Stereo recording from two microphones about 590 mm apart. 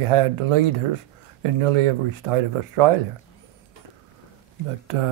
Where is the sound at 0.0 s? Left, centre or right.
Right.